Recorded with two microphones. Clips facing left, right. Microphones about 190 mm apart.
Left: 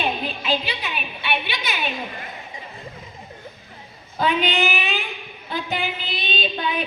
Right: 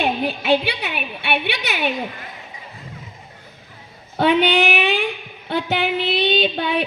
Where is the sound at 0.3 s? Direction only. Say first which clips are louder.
Right 6 dB; 70° right (ahead or behind).